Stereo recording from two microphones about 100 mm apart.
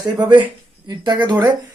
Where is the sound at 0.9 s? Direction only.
45° right (ahead or behind).